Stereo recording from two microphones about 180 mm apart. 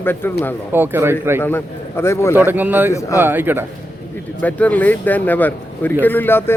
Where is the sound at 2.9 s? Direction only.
15° left (ahead or behind).